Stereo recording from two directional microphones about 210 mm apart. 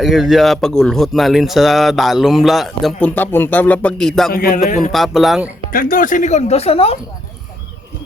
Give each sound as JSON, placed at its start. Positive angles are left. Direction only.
{"t": 0.0, "sound": "speech", "side_deg": 0}
{"t": 4.3, "sound": "a man's voice", "side_deg": 45}
{"t": 4.9, "sound": "speech", "side_deg": 0}
{"t": 5.7, "sound": "speech", "side_deg": 40}